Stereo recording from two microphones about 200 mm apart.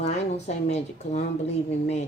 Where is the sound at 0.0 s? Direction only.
35° left (ahead or behind).